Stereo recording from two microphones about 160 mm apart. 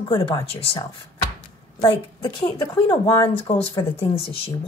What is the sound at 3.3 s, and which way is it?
Speech, 35° left (ahead or behind).